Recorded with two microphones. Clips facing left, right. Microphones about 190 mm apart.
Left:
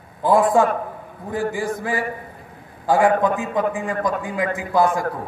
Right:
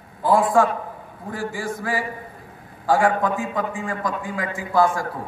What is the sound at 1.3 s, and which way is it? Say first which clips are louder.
A man's voice: left 4 dB; 20° left (ahead or behind).